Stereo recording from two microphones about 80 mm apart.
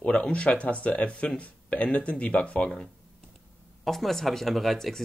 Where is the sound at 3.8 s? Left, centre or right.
Centre.